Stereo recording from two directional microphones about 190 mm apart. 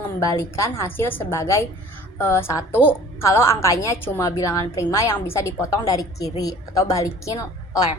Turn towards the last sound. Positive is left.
turn(degrees=20)  # may be behind; listen again after turning